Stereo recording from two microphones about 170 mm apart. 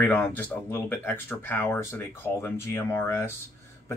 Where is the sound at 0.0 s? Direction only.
10° left (ahead or behind).